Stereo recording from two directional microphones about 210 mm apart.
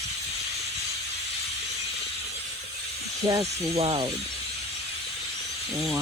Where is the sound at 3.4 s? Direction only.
30° right (ahead or behind).